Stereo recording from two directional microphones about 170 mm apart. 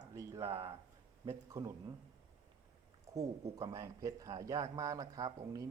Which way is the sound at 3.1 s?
20° right (ahead or behind).